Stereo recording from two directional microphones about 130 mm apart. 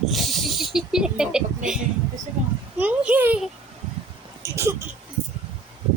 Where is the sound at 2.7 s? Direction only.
10° right (ahead or behind).